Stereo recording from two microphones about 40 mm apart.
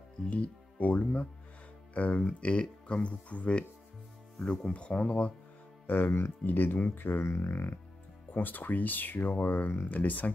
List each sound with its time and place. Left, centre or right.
0.3 s speech: left
2.4 s speech: left
6.0 s speech: left
6.4 s speech: left
6.8 s speech: left
8.3 s speech: left